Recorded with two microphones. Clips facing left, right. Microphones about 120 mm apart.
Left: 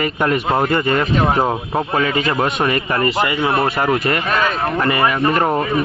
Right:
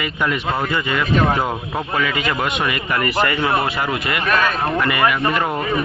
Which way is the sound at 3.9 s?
40° left (ahead or behind).